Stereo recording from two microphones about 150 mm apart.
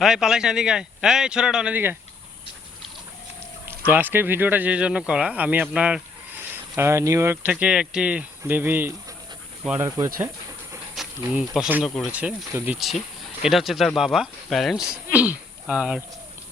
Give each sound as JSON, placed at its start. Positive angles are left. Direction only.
{"t": 0.0, "sound": "speech", "side_deg": -5}
{"t": 3.7, "sound": "speech", "side_deg": -10}
{"t": 7.5, "sound": "speech", "side_deg": -5}
{"t": 11.2, "sound": "speech", "side_deg": -5}